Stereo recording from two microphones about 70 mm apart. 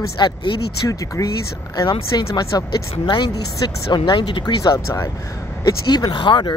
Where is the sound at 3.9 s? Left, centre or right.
Left.